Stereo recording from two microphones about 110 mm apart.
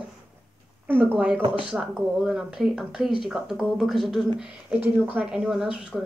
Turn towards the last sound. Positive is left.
turn(degrees=-5)  # may be behind; listen again after turning